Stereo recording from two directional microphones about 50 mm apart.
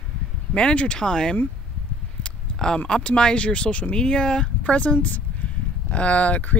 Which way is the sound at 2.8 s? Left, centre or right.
Centre.